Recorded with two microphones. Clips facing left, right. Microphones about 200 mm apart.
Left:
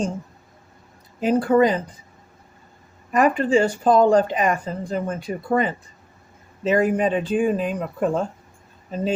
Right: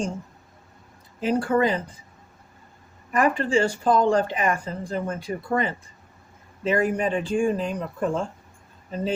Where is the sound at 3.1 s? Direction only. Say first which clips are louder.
Left 4 dB; 20° left (ahead or behind).